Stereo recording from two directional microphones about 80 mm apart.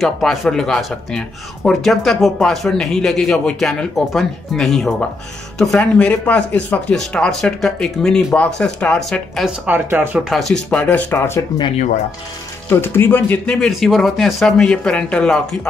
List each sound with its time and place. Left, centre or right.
0.0 s speech: centre
5.8 s speech: centre
9.7 s speech: right
10.3 s speech: centre
10.7 s speech: centre
11.1 s speech: left
12.6 s speech: left
13.5 s speech: centre